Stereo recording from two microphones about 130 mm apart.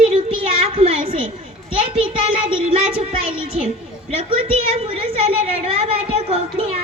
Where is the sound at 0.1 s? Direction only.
50° right (ahead or behind).